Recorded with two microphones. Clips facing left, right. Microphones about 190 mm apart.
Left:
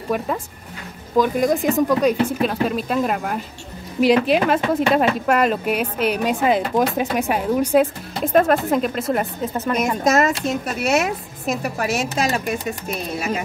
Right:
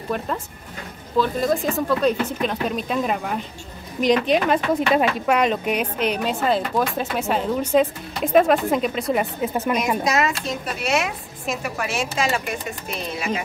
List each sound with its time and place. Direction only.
0.1 s speech: 10° left (ahead or behind)
9.4 s speech: 10° right (ahead or behind)
10.0 s speech: 45° left (ahead or behind)